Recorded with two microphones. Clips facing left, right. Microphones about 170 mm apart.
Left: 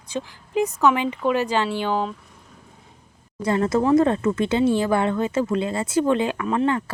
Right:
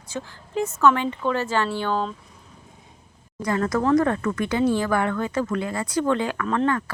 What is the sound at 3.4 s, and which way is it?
Speech, 25° left (ahead or behind).